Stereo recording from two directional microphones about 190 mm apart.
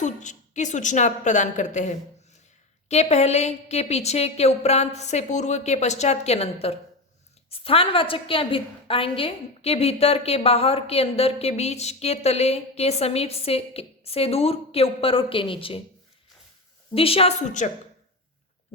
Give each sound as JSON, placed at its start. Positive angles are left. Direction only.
{"t": 0.0, "sound": "a woman's voice", "side_deg": 40}
{"t": 16.9, "sound": "a woman's voice", "side_deg": 30}